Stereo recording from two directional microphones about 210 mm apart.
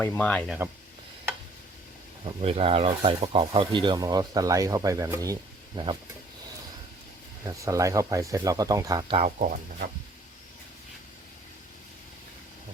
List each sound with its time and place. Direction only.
0.0 s speech: 10° left (ahead or behind)
2.4 s speech: 30° right (ahead or behind)
7.4 s speech: 15° right (ahead or behind)
9.2 s speech: 40° right (ahead or behind)